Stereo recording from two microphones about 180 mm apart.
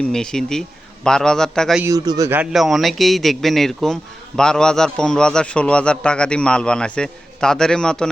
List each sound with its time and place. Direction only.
0.0 s a man's voice: 5° left (ahead or behind)
1.8 s a man's voice: 20° right (ahead or behind); by 8.1 s 5° left (ahead or behind)